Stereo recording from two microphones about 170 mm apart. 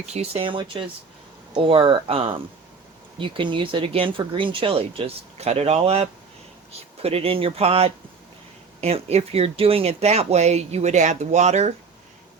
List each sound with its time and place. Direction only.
0.0 s speech: 40° right (ahead or behind)